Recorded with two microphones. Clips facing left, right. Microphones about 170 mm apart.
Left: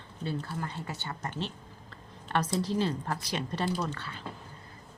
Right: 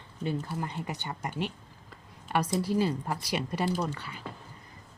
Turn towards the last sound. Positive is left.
turn(degrees=-10)  # may be behind; listen again after turning